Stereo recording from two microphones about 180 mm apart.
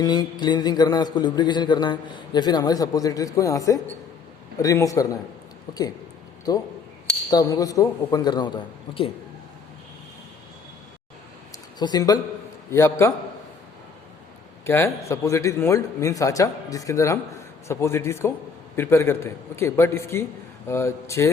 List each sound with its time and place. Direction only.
0.0 s a man's voice: 25° left (ahead or behind)
11.8 s a man's voice: 20° left (ahead or behind)
14.6 s a man's voice: 15° left (ahead or behind)